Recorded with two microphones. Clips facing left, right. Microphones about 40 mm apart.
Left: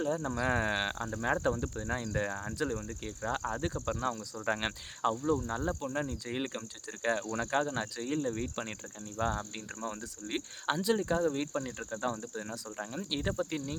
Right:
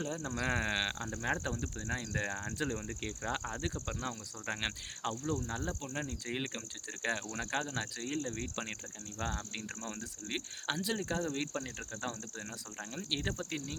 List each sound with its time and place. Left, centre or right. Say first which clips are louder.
0.0 s speech: left 5 dB; centre
1.2 s speech: left 6 dB; centre
2.6 s speech: left 4 dB; right
3.4 s speech: left 5 dB; centre
4.0 s speech: left 7 dB; right
4.4 s speech: left 5 dB; centre
5.2 s speech: left 5 dB; centre
9.6 s speech: left 3 dB; centre